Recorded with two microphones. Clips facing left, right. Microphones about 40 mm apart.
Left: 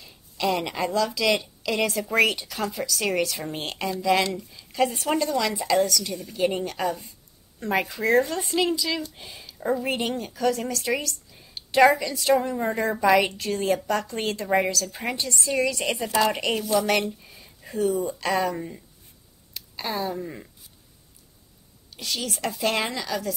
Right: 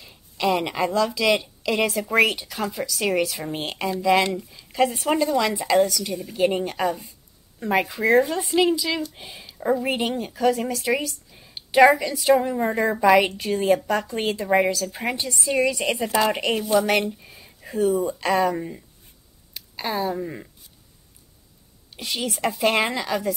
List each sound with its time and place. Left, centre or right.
0.0 s speech: centre
21.9 s a woman's voice: right